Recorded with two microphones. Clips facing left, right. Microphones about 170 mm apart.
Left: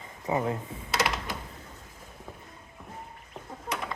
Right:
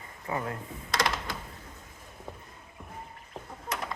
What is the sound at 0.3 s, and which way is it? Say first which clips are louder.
Speech: left 5 dB; 20° left (ahead or behind).